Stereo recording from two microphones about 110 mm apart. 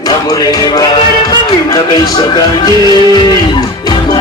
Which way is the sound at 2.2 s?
45° left (ahead or behind).